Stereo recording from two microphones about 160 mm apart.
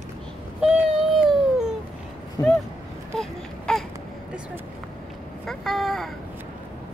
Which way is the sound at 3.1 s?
5° left (ahead or behind).